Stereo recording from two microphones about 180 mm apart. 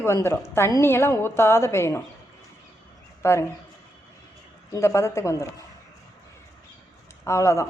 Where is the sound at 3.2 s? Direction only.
15° left (ahead or behind).